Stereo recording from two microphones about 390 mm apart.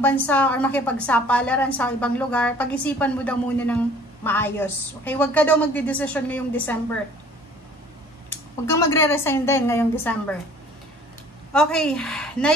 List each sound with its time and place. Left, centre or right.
0.0 s a woman's voice: centre
8.3 s a woman's voice: centre
11.5 s a woman's voice: centre